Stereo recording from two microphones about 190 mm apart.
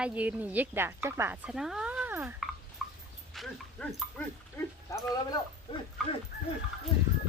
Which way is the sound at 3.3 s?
Centre (ahead or behind).